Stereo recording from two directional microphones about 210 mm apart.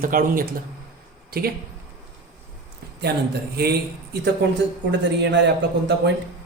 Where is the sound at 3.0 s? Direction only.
50° right (ahead or behind).